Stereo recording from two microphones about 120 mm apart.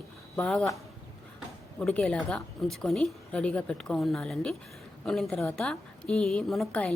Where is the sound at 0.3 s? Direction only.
10° left (ahead or behind).